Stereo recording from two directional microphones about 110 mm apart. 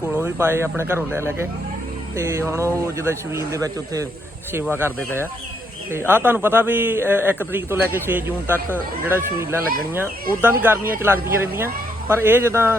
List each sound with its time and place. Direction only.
0.1 s speech: 20° right (ahead or behind)
5.9 s speech: 20° right (ahead or behind)